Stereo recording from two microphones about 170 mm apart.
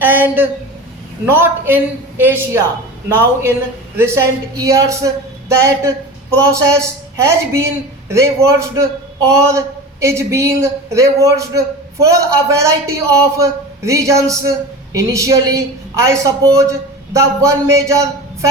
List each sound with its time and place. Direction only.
0.0 s a man's voice: 10° right (ahead or behind)